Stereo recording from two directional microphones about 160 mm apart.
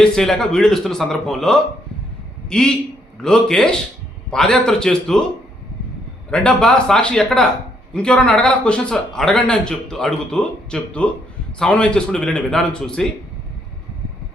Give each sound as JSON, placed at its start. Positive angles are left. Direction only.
{"t": 0.0, "sound": "a man's voice", "side_deg": 5}
{"t": 6.3, "sound": "a man's voice", "side_deg": 5}